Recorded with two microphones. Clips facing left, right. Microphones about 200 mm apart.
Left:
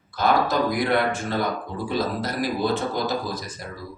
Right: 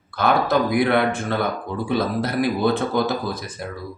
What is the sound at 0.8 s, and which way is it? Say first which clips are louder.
Speech: right 3 dB; 55° right (ahead or behind).